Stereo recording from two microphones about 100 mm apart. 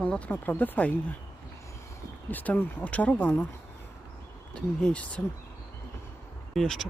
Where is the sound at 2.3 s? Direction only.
15° left (ahead or behind).